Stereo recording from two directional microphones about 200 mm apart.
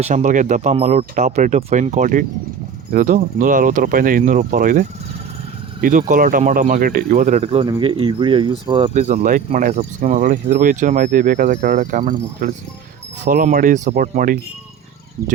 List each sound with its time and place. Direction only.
0.0 s speech: 40° right (ahead or behind)